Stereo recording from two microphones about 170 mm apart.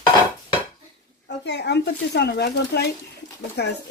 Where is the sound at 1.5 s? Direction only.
90° left.